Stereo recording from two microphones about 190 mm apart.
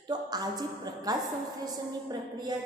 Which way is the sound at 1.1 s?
20° right (ahead or behind).